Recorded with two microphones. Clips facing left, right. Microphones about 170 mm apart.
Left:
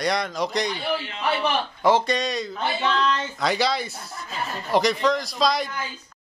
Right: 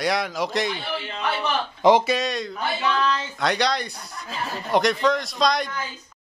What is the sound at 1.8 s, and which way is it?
Speech, 15° right (ahead or behind).